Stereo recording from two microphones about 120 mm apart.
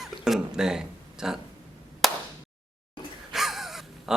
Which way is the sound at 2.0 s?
Centre (ahead or behind).